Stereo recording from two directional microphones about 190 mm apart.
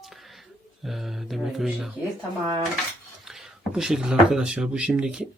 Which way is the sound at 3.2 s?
Centre (ahead or behind).